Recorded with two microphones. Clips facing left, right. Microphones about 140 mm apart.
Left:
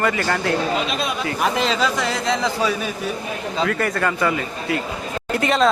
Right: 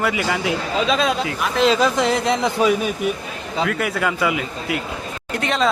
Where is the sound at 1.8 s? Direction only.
20° right (ahead or behind).